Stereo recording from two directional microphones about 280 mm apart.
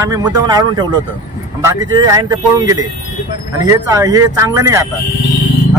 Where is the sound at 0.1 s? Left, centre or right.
Centre.